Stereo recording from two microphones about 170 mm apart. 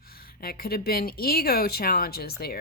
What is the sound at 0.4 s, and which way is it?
Speech, 65° left (ahead or behind).